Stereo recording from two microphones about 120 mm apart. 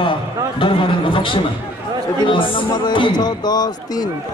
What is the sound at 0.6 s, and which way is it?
Speech, 45° left (ahead or behind).